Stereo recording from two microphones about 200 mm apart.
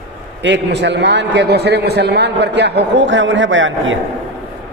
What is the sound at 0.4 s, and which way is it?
A man's voice, 60° right (ahead or behind).